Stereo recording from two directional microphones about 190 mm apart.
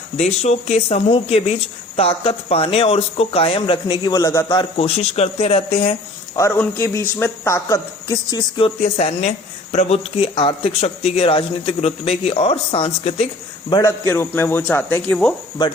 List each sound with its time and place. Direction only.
0.2 s speech: 35° left (ahead or behind)
4.9 s speech: 35° left (ahead or behind)
6.3 s speech: 15° left (ahead or behind)
14.1 s speech: 10° left (ahead or behind)